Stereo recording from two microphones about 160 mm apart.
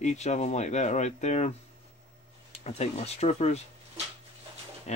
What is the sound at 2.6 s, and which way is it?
Speech, 40° left (ahead or behind).